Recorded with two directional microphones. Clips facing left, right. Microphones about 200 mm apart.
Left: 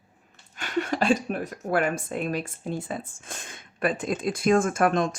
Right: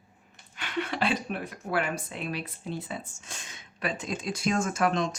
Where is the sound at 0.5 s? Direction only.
45° left (ahead or behind).